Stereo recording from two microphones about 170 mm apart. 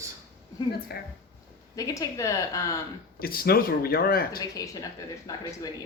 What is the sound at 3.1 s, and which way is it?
Speech, 60° left (ahead or behind).